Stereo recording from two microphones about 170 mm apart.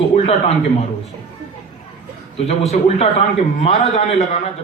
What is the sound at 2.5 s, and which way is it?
A man's voice, 40° left (ahead or behind).